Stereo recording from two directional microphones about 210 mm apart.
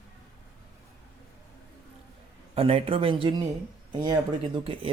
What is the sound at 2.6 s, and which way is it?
Speech, 25° right (ahead or behind).